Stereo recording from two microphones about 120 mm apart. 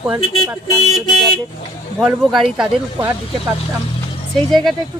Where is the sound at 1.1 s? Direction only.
40° left (ahead or behind).